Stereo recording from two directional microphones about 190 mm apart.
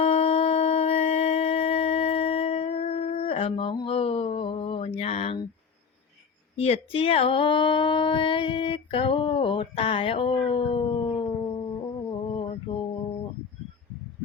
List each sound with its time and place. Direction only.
0.0 s a sound: 30° left (ahead or behind)
4.9 s speech: 35° left (ahead or behind)
6.6 s speech: 30° left (ahead or behind)
12.3 s mantra: 25° left (ahead or behind)